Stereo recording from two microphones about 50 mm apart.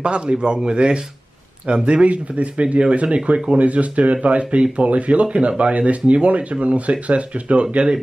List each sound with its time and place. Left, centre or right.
0.0 s speech: right